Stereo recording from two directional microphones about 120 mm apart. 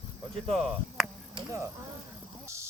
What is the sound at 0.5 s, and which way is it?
Speech, centre (ahead or behind).